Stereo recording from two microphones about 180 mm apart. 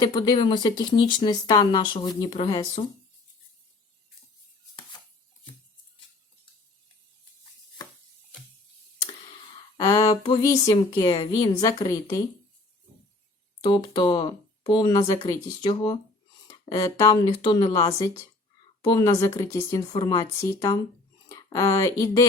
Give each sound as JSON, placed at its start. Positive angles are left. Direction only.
{"t": 0.0, "sound": "speech", "side_deg": 25}
{"t": 9.7, "sound": "speech", "side_deg": 20}
{"t": 13.6, "sound": "speech", "side_deg": 25}